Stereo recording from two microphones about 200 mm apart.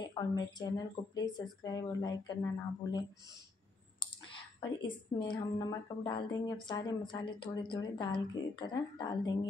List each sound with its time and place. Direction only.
0.0 s speech: 20° left (ahead or behind)
4.6 s speech: 20° left (ahead or behind)